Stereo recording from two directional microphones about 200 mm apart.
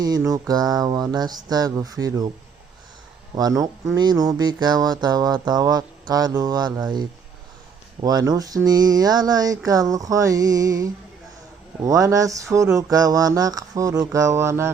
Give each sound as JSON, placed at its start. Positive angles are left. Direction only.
{"t": 0.0, "sound": "speech", "side_deg": -20}
{"t": 3.3, "sound": "speech", "side_deg": -20}
{"t": 8.0, "sound": "a sound", "side_deg": -20}